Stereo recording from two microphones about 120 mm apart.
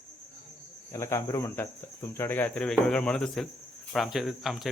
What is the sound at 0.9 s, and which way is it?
Speech, 25° left (ahead or behind).